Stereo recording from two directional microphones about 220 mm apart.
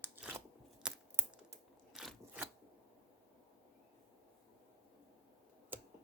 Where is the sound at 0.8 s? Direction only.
5° right (ahead or behind).